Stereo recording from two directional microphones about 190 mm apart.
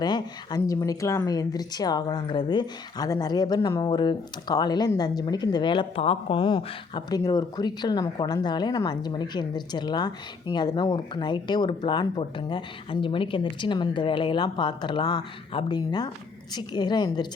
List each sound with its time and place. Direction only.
0.0 s speech: 20° left (ahead or behind)